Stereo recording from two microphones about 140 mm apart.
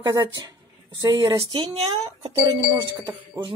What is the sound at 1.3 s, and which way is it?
Speech, 40° right (ahead or behind).